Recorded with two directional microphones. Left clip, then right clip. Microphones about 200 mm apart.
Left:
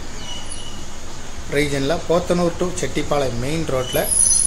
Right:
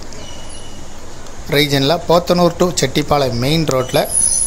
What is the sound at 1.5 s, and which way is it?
Speech, 50° right (ahead or behind).